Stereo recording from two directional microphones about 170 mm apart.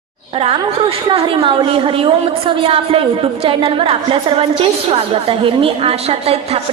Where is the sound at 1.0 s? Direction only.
30° right (ahead or behind).